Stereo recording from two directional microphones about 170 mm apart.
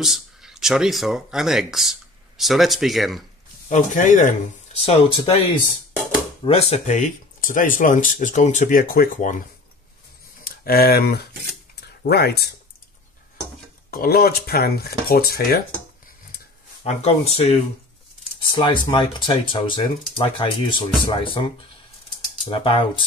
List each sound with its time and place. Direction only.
0.0 s speech: 5° right (ahead or behind)
3.6 s speech: 50° left (ahead or behind); by 5.3 s 30° left (ahead or behind)
6.4 s speech: 35° left (ahead or behind); by 9.4 s 50° left (ahead or behind)
10.4 s speech: 60° left (ahead or behind)
13.8 s speech: 60° left (ahead or behind)
16.8 s speech: 40° left (ahead or behind)